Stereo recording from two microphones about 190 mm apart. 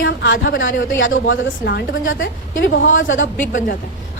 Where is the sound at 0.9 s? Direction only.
80° left; by 2.1 s 55° left (ahead or behind).